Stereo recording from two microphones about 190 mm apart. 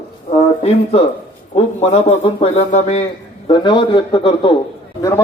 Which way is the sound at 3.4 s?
25° left (ahead or behind).